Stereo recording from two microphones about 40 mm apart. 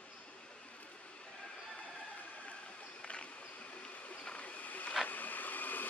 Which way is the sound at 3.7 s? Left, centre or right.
Left.